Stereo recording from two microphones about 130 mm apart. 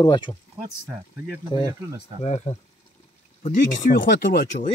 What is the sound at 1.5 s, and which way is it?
Speech, 35° left (ahead or behind).